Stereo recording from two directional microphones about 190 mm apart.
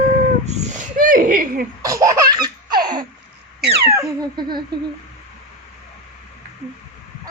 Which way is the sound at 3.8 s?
15° right (ahead or behind).